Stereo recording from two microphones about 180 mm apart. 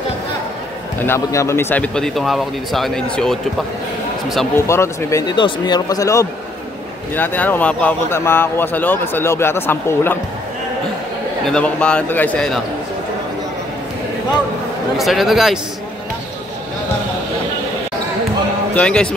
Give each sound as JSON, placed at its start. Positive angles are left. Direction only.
{"t": 1.0, "sound": "speech", "side_deg": 15}
{"t": 4.6, "sound": "speech", "side_deg": 15}
{"t": 11.4, "sound": "speech", "side_deg": 5}
{"t": 15.0, "sound": "speech", "side_deg": 0}
{"t": 18.8, "sound": "speech", "side_deg": 5}